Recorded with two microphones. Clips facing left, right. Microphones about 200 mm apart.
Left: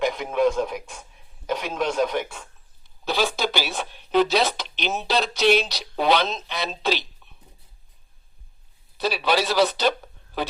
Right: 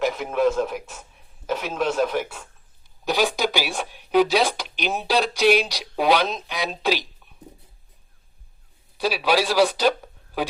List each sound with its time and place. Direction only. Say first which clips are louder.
0.0 s a man's voice: even; 5° right (ahead or behind)
9.0 s speech: right 1 dB; 10° right (ahead or behind)